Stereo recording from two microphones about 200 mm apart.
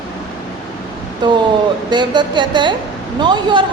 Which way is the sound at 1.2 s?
20° right (ahead or behind).